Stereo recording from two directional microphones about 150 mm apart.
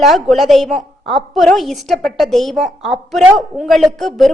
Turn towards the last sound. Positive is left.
turn(degrees=0)  # may be behind; listen again after turning